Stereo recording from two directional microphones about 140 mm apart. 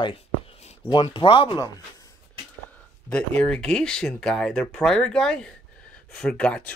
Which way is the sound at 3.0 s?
10° left (ahead or behind).